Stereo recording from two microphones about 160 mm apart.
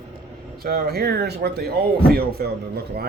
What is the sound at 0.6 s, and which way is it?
Speech, 75° right (ahead or behind).